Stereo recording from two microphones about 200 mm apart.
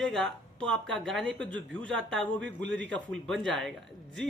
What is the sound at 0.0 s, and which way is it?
Speech, centre (ahead or behind).